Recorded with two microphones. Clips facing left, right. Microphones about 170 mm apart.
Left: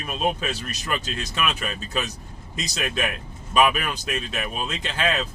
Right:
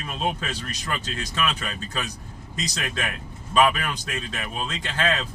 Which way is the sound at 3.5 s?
15° left (ahead or behind).